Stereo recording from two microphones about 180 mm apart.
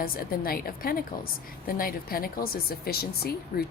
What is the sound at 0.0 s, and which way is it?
Speech, 55° left (ahead or behind).